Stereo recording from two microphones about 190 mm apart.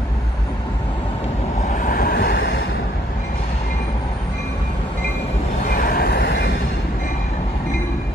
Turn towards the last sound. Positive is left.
turn(degrees=60)  # may be behind; listen again after turning